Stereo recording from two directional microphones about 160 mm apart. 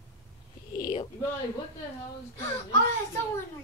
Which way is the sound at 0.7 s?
25° left (ahead or behind).